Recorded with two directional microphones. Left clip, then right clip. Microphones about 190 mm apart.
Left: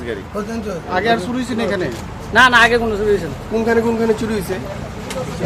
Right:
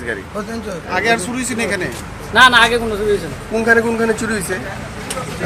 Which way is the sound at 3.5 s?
5° right (ahead or behind).